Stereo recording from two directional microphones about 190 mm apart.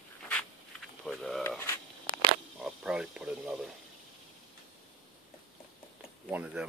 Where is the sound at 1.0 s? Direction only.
Centre (ahead or behind).